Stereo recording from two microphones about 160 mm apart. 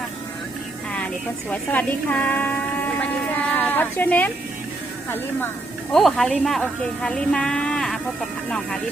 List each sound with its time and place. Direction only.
0.9 s speech: 10° left (ahead or behind)
3.0 s music: 10° left (ahead or behind)
5.9 s a woman's voice: centre (ahead or behind)